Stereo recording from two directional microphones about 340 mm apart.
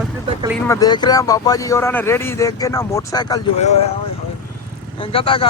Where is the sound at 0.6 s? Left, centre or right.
Centre.